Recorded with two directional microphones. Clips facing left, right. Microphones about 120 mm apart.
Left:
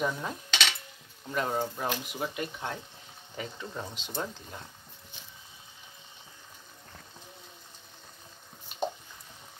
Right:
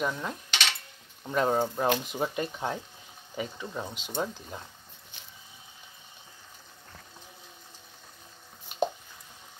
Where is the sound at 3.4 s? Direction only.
10° right (ahead or behind).